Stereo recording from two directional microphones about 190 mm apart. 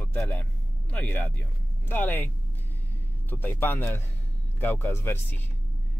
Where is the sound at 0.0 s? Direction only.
5° left (ahead or behind).